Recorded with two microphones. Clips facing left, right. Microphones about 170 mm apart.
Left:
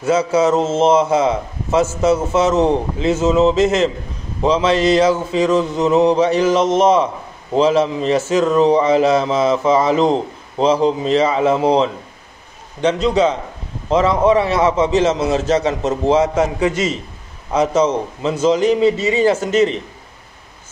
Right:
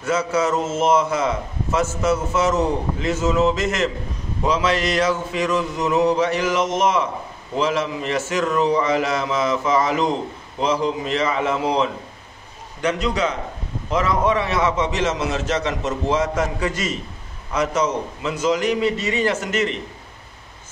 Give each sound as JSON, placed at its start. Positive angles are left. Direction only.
{"t": 0.0, "sound": "a man's voice", "side_deg": 25}